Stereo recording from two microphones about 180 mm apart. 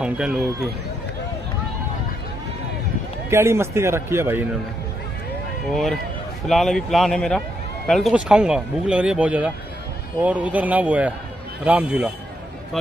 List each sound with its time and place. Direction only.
0.0 s a man's voice: 5° right (ahead or behind)
3.3 s a man's voice: 15° right (ahead or behind)
5.7 s a man's voice: centre (ahead or behind)